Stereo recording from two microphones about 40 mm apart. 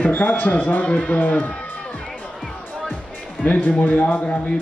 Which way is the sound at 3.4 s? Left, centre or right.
Left.